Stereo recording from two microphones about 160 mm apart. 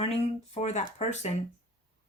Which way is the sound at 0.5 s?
45° left (ahead or behind).